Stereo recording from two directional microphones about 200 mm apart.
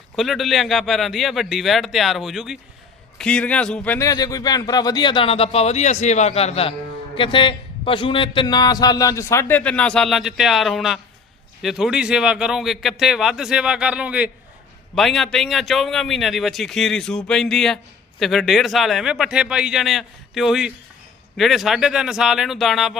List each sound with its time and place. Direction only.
0.2 s a man's voice: centre (ahead or behind)